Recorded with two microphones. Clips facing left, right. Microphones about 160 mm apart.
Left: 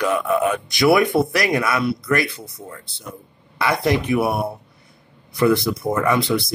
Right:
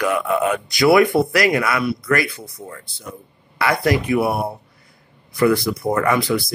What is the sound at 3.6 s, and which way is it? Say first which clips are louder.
Speech: right 1 dB; 20° left (ahead or behind).